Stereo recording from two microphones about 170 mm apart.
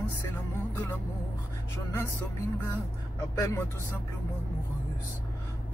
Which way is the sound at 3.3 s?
15° left (ahead or behind).